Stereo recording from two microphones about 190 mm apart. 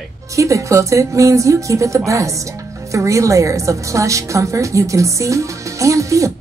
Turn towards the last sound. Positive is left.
turn(degrees=-15)  # may be behind; listen again after turning